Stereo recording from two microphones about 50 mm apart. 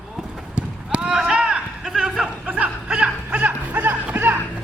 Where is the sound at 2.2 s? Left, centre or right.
Right.